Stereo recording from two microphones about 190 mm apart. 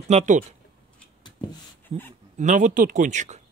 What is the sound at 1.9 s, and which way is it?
Speech, 35° right (ahead or behind).